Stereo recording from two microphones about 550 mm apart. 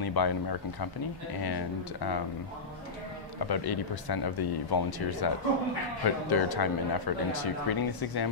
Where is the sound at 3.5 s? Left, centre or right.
Left.